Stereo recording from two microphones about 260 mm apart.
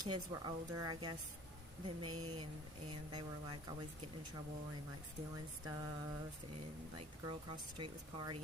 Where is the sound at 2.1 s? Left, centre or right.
Right.